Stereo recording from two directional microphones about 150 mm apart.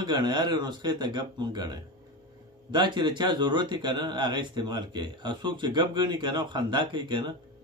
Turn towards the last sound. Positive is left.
turn(degrees=-30)  # may be behind; listen again after turning